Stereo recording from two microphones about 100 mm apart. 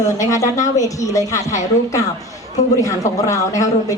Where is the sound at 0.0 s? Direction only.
35° left (ahead or behind).